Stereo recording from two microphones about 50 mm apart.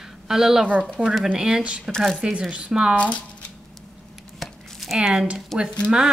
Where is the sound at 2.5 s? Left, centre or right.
Centre.